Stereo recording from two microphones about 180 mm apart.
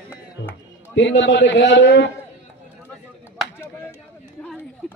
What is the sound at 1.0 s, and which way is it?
A man's voice, 80° left.